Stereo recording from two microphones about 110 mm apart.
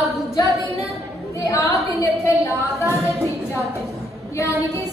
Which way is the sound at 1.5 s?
30° left (ahead or behind).